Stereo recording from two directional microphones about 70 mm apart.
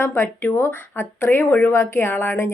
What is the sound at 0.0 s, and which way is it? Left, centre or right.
A woman's voice, left.